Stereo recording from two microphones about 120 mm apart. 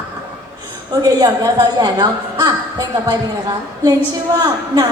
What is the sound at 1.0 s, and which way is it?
A woman's voice, 35° right (ahead or behind).